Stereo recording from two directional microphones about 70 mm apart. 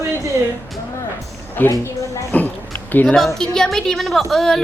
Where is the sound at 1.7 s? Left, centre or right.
Left.